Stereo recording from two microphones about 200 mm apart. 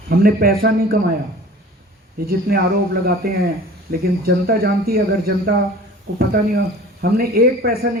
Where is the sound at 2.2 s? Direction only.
50° right (ahead or behind).